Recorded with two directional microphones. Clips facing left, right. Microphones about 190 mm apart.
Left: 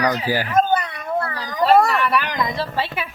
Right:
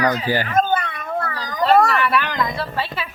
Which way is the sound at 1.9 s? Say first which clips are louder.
Even; centre (ahead or behind).